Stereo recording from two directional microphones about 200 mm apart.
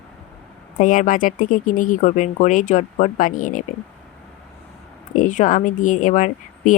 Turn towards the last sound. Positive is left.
turn(degrees=40)  # may be behind; listen again after turning